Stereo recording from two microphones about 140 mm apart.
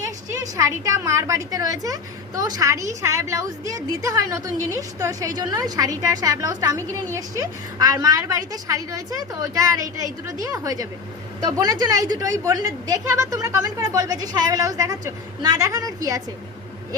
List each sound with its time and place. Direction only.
0.0 s a woman's voice: 25° right (ahead or behind)